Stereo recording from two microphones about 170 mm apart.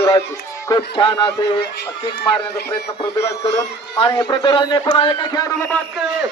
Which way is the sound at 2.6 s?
15° left (ahead or behind).